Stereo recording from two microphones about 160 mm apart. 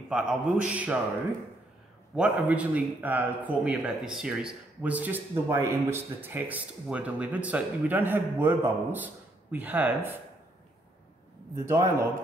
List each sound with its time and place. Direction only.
0.1 s speech: 5° right (ahead or behind)
2.1 s speech: 5° right (ahead or behind)
11.6 s speech: 15° right (ahead or behind)